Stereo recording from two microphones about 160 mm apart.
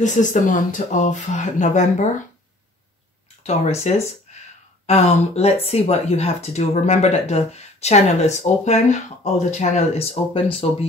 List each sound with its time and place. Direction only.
0.0 s speech: 50° left (ahead or behind)
3.4 s speech: 40° left (ahead or behind)